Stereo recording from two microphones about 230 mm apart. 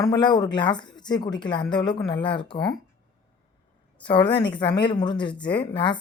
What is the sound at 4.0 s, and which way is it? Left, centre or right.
A woman's voice, centre.